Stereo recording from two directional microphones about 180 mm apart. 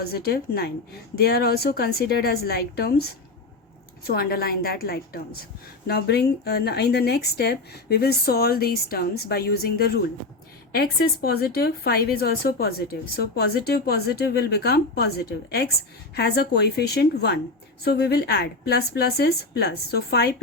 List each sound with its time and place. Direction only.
0.0 s speech: 60° left (ahead or behind)